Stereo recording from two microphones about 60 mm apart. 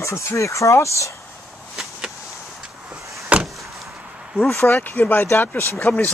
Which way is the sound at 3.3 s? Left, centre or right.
Right.